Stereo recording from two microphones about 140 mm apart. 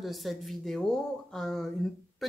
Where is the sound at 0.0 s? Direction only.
Centre (ahead or behind).